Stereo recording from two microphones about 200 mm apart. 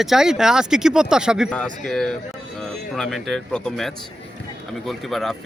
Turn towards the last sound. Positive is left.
turn(degrees=0)  # may be behind; listen again after turning